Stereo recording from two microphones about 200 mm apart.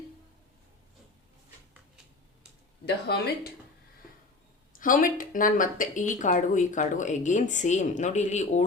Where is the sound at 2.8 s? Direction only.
50° left (ahead or behind).